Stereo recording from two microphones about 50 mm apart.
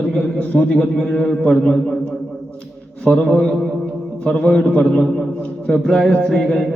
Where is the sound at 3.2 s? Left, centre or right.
Left.